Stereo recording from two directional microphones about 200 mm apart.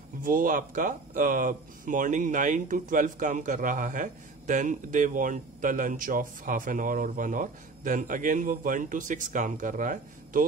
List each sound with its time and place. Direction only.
0.2 s speech: 45° right (ahead or behind)